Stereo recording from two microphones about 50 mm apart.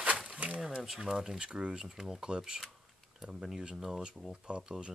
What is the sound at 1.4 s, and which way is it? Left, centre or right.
Speech, centre.